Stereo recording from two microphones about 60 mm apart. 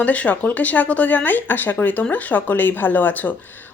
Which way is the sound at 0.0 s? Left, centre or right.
Left.